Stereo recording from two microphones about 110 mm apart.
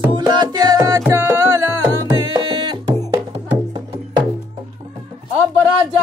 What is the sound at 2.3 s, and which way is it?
Music, 40° right (ahead or behind).